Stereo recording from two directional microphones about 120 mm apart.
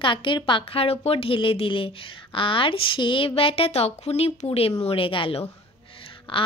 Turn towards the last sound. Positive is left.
turn(degrees=45)  # may be behind; listen again after turning